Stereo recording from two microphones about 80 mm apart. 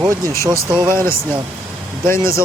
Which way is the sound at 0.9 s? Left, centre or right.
Left.